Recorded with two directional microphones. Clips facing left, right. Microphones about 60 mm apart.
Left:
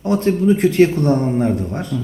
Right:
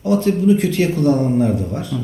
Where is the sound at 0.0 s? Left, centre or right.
Left.